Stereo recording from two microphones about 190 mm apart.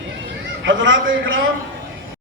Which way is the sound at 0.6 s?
75° right (ahead or behind).